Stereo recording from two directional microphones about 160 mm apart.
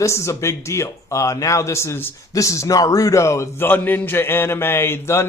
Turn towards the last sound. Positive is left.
turn(degrees=15)  # may be behind; listen again after turning